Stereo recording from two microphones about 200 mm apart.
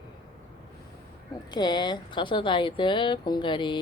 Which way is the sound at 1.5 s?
20° left (ahead or behind).